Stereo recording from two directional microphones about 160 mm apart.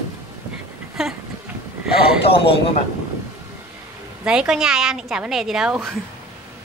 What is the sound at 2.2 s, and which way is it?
Speech, 35° left (ahead or behind).